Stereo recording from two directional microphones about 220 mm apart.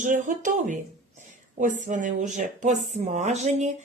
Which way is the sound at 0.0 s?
35° right (ahead or behind).